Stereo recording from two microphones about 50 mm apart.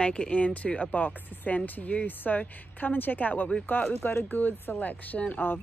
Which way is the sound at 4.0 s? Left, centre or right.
Left.